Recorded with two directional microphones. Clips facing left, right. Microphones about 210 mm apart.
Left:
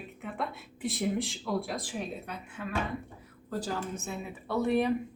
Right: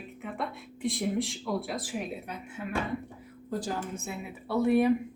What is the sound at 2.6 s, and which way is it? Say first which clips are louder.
Speech: right 1 dB; 20° right (ahead or behind).